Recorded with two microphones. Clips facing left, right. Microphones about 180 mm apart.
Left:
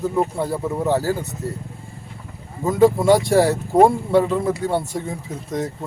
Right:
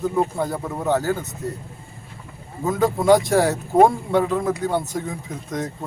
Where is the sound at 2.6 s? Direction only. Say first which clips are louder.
Left 4 dB; centre (ahead or behind).